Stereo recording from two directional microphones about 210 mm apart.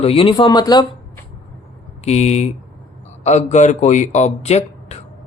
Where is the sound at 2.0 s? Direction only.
30° left (ahead or behind).